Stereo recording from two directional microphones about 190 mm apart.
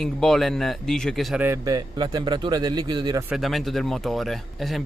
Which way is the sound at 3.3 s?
Centre (ahead or behind).